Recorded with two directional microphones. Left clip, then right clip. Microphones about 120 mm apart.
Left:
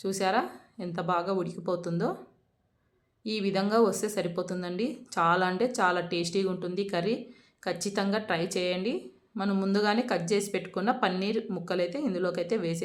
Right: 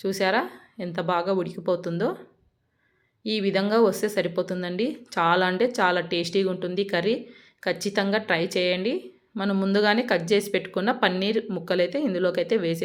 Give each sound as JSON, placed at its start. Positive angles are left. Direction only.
{"t": 0.0, "sound": "speech", "side_deg": -15}
{"t": 3.2, "sound": "speech", "side_deg": -15}